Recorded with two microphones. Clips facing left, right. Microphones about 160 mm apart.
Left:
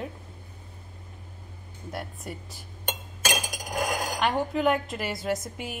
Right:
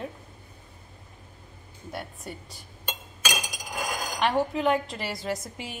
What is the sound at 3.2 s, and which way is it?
Chink, 45° left (ahead or behind).